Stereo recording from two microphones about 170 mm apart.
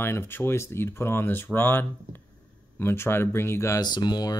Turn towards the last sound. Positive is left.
turn(degrees=25)  # may be behind; listen again after turning